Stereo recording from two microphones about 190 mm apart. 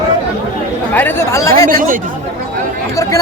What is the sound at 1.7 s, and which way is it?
Speech, 45° right (ahead or behind).